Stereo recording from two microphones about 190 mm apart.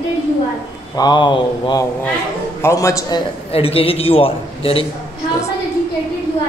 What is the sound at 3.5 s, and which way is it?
A man's voice, 30° left (ahead or behind).